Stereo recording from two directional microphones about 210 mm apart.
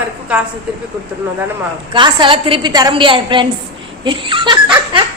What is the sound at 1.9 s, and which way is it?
A woman's voice, 20° right (ahead or behind).